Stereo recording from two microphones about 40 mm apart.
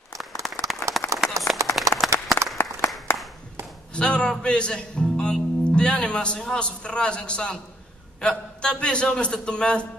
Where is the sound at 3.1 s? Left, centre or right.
Left.